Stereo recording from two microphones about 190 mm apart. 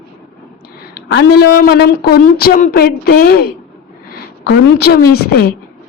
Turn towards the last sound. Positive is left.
turn(degrees=55)  # may be behind; listen again after turning